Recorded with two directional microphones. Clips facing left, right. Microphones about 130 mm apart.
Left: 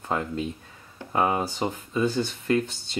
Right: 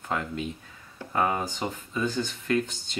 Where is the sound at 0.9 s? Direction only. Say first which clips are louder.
Left 2 dB; 20° left (ahead or behind).